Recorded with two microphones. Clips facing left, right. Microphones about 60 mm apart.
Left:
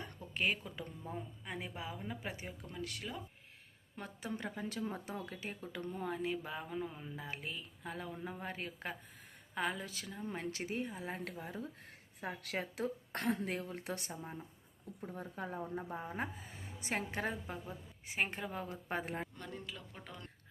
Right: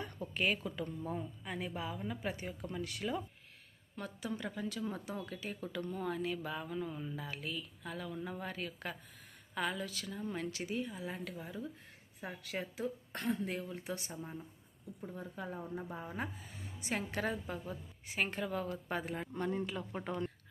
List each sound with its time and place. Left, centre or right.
0.0 s a woman's voice: centre
3.9 s a woman's voice: left
14.2 s speech: centre
15.1 s a woman's voice: left
15.9 s speech: left
19.4 s speech: right
19.9 s speech: right